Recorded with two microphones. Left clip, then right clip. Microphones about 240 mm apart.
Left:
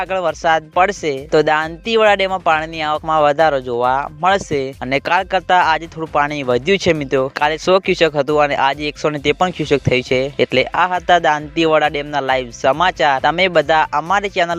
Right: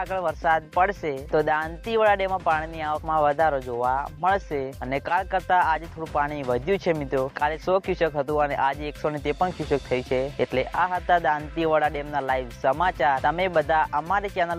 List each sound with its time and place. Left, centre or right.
0.0 s speech: left